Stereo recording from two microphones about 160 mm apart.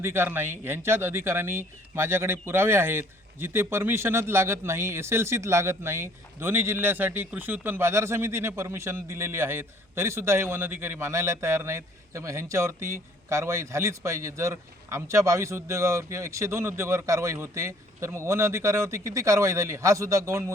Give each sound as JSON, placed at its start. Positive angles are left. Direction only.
{"t": 0.0, "sound": "speech", "side_deg": -15}